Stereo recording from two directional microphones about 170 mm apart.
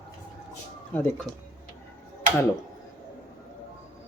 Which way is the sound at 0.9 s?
10° left (ahead or behind).